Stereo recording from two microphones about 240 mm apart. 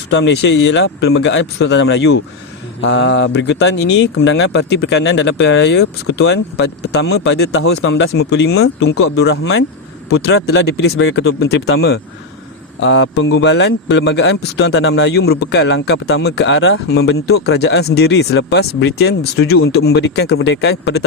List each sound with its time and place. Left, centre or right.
0.1 s speech: left